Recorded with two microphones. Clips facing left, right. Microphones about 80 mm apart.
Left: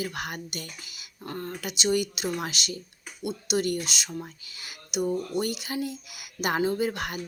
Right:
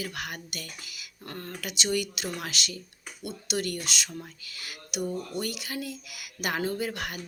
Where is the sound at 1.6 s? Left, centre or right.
Left.